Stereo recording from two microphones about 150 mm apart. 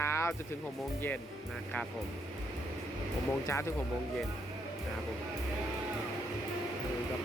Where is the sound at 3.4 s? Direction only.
20° left (ahead or behind).